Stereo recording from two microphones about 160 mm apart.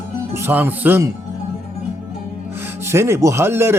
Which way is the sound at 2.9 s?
15° right (ahead or behind).